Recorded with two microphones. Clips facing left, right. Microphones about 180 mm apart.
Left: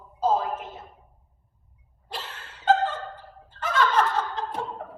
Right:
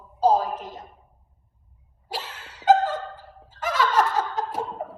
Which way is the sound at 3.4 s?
10° right (ahead or behind).